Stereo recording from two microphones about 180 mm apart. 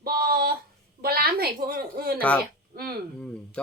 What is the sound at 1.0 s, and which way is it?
A woman's voice, 60° right (ahead or behind).